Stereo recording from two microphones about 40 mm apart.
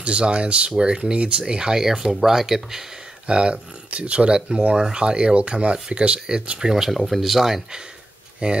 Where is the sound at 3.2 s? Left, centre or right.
Right.